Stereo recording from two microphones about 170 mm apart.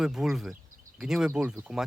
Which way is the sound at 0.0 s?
5° right (ahead or behind).